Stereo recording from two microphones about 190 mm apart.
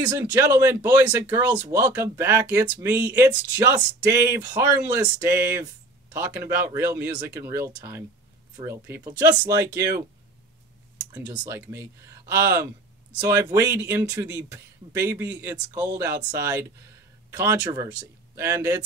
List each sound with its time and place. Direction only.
0.1 s speech: 15° right (ahead or behind)
11.1 s speech: 10° right (ahead or behind)